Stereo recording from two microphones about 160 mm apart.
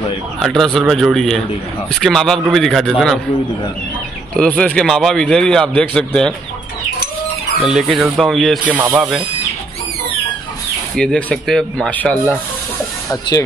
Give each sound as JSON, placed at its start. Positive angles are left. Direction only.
{"t": 0.4, "sound": "a man's voice", "side_deg": 5}
{"t": 4.3, "sound": "a man's voice", "side_deg": 5}
{"t": 7.6, "sound": "a man's voice", "side_deg": -5}
{"t": 8.8, "sound": "speech", "side_deg": -25}
{"t": 11.0, "sound": "a man's voice", "side_deg": 5}
{"t": 13.3, "sound": "speech", "side_deg": 20}